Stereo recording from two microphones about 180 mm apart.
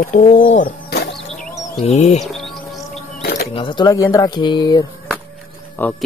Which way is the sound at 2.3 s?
Centre (ahead or behind).